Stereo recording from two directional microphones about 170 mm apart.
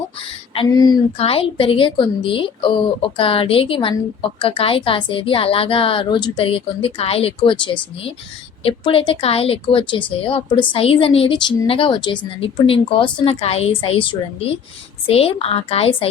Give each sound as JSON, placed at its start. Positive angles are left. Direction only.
{"t": 0.2, "sound": "a sound", "side_deg": 35}
{"t": 0.7, "sound": "speech", "side_deg": 25}
{"t": 1.2, "sound": "speech", "side_deg": 35}